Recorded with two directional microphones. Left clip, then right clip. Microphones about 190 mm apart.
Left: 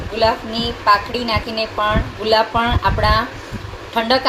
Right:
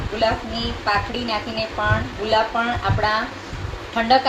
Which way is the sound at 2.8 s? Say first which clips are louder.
Left 4 dB; 40° left (ahead or behind).